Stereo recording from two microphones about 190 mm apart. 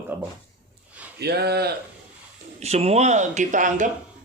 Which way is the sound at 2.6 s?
35° right (ahead or behind).